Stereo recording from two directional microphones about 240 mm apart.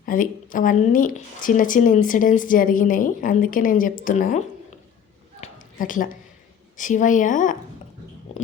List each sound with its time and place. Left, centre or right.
0.0 s speech: left
5.4 s a sound: left
6.7 s speech: left